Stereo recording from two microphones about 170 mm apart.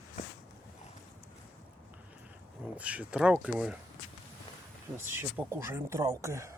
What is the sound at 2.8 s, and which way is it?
Speech, 5° right (ahead or behind).